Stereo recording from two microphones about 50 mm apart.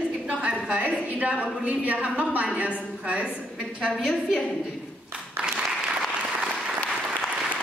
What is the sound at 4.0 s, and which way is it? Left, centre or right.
Speech, centre.